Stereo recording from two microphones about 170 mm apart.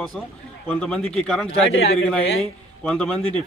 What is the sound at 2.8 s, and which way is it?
Speech, 5° left (ahead or behind).